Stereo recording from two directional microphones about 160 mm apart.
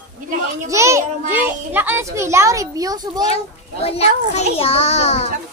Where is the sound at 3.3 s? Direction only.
40° left (ahead or behind).